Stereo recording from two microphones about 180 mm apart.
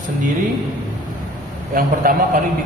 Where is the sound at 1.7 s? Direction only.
50° right (ahead or behind).